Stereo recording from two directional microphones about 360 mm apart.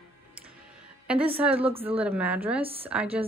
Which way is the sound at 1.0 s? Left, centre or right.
Centre.